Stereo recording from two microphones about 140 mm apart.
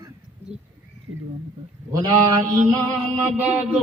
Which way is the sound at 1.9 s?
25° right (ahead or behind).